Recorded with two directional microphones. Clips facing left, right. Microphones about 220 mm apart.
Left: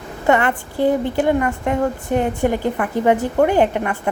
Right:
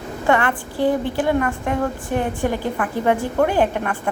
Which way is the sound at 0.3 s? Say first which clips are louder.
Left 2 dB; 20° left (ahead or behind).